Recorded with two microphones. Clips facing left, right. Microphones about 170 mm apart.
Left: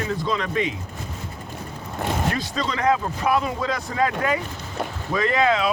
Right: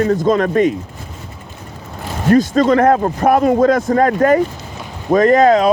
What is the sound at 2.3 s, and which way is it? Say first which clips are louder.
Speech: right 15 dB; 45° right (ahead or behind).